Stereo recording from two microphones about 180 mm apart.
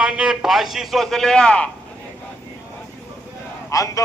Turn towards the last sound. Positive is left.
turn(degrees=20)  # may be behind; listen again after turning